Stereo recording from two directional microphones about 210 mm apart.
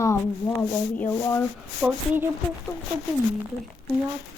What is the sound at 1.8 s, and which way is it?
Speech, 5° right (ahead or behind).